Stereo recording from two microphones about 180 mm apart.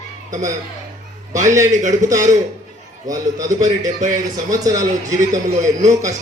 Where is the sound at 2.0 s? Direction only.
15° right (ahead or behind).